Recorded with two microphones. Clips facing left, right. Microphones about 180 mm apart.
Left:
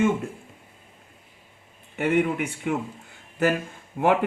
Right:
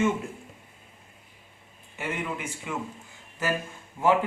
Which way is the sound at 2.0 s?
65° left (ahead or behind).